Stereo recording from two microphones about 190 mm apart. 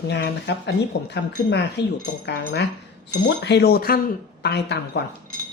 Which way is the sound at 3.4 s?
60° left (ahead or behind).